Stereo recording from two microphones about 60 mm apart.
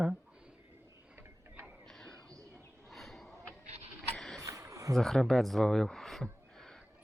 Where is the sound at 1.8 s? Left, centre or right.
Centre.